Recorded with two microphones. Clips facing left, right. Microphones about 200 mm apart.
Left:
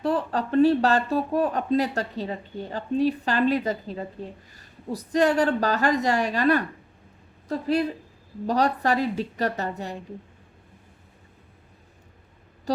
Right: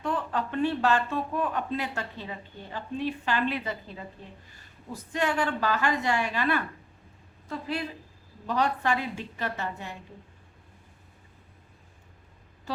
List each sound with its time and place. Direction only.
0.0 s a woman's voice: 35° left (ahead or behind)
12.7 s speech: 40° left (ahead or behind)